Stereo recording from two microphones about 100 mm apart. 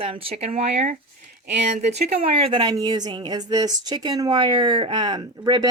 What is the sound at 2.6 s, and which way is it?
A woman's voice, 45° right (ahead or behind).